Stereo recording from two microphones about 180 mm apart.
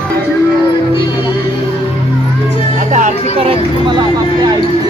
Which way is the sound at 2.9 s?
35° right (ahead or behind).